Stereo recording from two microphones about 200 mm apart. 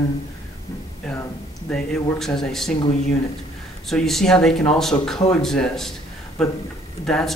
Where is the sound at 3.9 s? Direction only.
Centre (ahead or behind).